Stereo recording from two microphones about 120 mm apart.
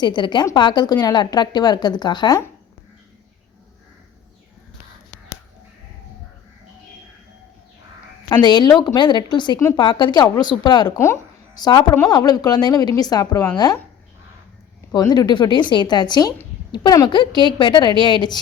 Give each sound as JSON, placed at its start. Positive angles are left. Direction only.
{"t": 0.0, "sound": "speech", "side_deg": 40}
{"t": 8.3, "sound": "speech", "side_deg": 40}
{"t": 10.9, "sound": "speech", "side_deg": 20}
{"t": 11.5, "sound": "speech", "side_deg": 35}
{"t": 14.9, "sound": "speech", "side_deg": 35}